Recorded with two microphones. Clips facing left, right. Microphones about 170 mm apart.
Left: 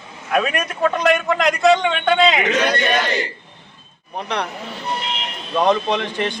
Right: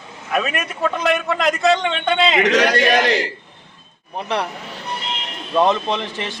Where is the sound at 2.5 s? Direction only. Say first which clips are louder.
Right 3 dB; 90° right.